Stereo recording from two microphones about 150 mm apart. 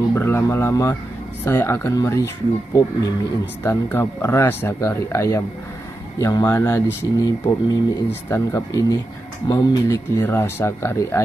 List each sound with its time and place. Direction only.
0.1 s speech: 15° left (ahead or behind)